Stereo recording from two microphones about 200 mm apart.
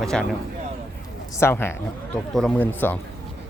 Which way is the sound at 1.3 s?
10° left (ahead or behind).